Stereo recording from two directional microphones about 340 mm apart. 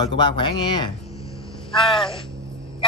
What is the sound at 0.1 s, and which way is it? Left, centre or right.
Speech, centre.